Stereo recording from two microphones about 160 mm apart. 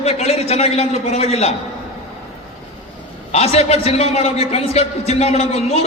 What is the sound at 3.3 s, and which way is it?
A man's voice, 40° left (ahead or behind).